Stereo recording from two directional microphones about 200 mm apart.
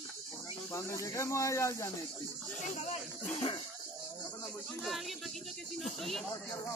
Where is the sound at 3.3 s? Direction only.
25° left (ahead or behind).